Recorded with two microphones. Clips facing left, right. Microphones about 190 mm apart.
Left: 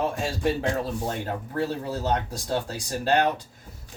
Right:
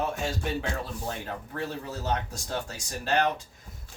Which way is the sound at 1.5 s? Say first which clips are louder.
Left 7 dB; 35° left (ahead or behind).